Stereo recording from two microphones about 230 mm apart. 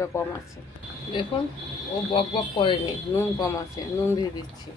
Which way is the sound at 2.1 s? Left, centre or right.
Left.